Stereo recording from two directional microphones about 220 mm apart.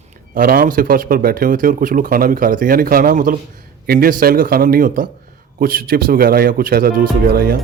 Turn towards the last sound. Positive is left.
turn(degrees=-45)  # may be behind; listen again after turning